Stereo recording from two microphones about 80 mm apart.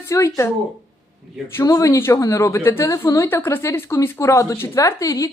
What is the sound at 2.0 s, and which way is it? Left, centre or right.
A woman's voice, left.